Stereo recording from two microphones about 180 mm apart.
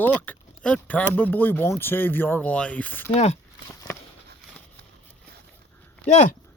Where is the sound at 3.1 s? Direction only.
35° left (ahead or behind).